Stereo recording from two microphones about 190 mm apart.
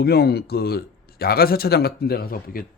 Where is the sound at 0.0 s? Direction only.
55° left (ahead or behind).